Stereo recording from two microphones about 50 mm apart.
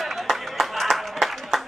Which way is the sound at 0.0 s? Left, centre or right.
Centre.